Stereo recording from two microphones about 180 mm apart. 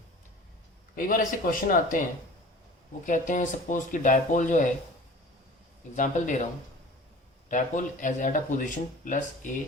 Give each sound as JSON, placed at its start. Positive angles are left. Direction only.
{"t": 0.9, "sound": "speech", "side_deg": 50}
{"t": 3.1, "sound": "speech", "side_deg": 45}
{"t": 6.0, "sound": "speech", "side_deg": 45}